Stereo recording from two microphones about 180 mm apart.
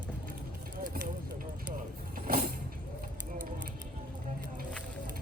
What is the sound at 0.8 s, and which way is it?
Vehicle, 50° right (ahead or behind).